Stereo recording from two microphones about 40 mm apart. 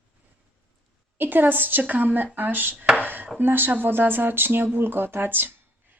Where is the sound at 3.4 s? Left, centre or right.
Right.